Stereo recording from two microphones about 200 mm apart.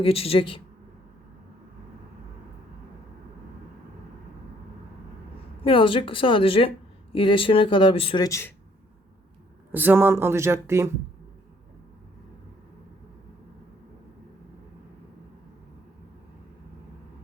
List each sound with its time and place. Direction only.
0.0 s speech: 30° left (ahead or behind)
5.6 s speech: 25° left (ahead or behind)
9.7 s speech: 10° right (ahead or behind)